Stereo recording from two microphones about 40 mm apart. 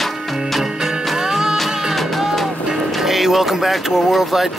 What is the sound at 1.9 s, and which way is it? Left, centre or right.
Music, centre.